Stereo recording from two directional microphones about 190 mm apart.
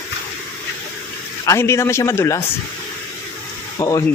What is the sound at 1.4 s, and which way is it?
Speech, 15° left (ahead or behind).